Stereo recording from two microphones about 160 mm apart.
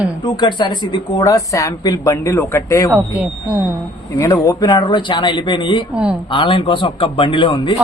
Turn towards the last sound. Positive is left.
turn(degrees=30)  # may be behind; listen again after turning